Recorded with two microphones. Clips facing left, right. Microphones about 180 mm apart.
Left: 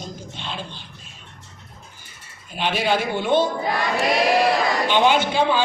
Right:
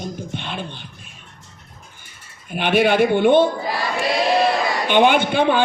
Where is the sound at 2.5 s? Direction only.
60° right (ahead or behind).